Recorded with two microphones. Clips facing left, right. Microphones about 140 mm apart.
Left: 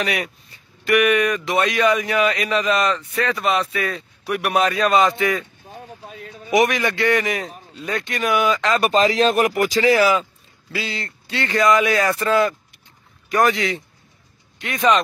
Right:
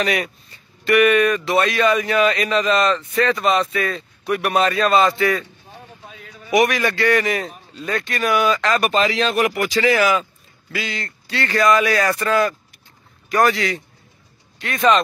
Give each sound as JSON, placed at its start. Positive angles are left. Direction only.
{"t": 0.0, "sound": "speech", "side_deg": 10}
{"t": 8.9, "sound": "speech", "side_deg": 40}